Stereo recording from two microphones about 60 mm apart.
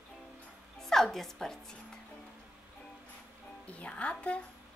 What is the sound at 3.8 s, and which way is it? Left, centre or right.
Speech, left.